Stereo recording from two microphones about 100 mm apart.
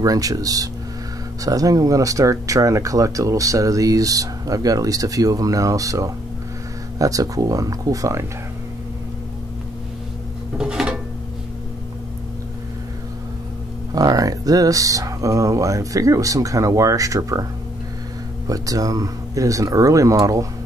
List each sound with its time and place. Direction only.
0.0 s speech: 35° right (ahead or behind)
10.6 s a sound: 10° right (ahead or behind)
13.9 s speech: 40° right (ahead or behind)
18.5 s speech: 35° right (ahead or behind)